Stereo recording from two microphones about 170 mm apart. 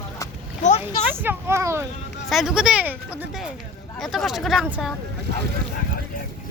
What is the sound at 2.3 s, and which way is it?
Speech, centre (ahead or behind).